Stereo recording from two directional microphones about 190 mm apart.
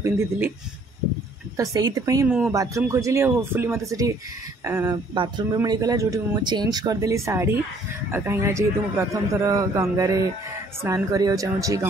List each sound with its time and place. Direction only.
1.6 s a man's voice: 20° right (ahead or behind)